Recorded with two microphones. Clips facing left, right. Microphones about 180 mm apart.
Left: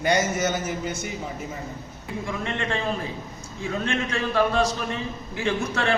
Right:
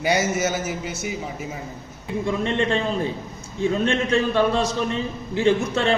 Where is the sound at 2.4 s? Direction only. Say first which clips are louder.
Right 6 dB; 30° right (ahead or behind).